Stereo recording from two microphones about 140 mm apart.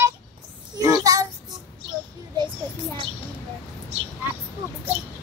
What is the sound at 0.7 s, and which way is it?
Speech, 25° right (ahead or behind).